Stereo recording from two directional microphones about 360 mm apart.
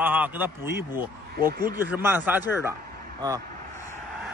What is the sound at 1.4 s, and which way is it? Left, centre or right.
Speech, right.